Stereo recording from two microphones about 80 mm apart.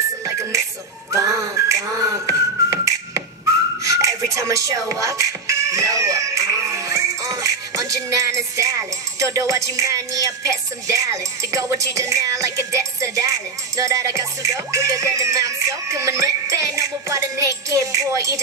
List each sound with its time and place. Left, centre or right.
0.2 s music: right
3.8 s speech: right